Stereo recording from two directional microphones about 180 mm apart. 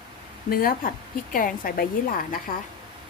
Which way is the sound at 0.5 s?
50° left (ahead or behind).